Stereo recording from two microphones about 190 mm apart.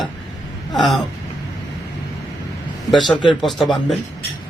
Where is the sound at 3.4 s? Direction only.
Centre (ahead or behind).